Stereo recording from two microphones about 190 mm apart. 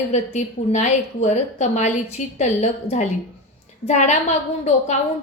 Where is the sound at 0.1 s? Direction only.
35° left (ahead or behind).